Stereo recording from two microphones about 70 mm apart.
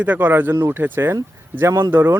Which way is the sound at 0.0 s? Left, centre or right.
Right.